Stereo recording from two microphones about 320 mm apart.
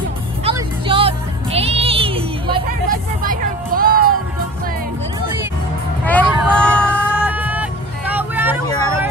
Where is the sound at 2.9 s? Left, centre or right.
Right.